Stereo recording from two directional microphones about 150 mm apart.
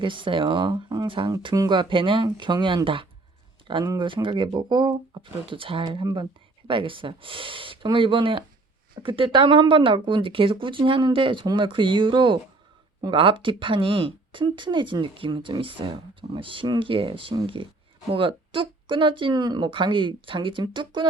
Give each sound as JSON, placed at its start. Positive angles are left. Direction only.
{"t": 0.0, "sound": "speech", "side_deg": -35}